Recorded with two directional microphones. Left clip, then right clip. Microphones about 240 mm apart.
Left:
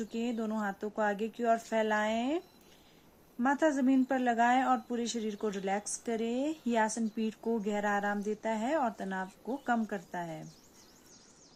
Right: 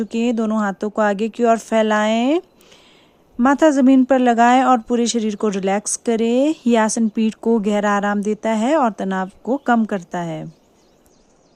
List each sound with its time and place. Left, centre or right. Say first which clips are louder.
0.0 s speech: right 15 dB; right